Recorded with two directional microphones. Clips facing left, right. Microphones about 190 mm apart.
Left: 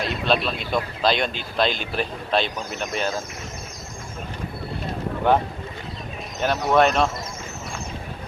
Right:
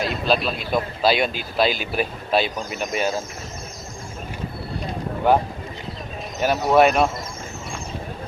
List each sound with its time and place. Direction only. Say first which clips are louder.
0.0 s a man's voice: right 1 dB; 5° right (ahead or behind)
6.4 s speech: right 2 dB; 10° right (ahead or behind)